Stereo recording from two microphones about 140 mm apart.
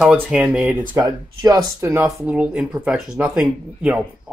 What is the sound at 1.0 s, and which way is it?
Speech, 25° right (ahead or behind).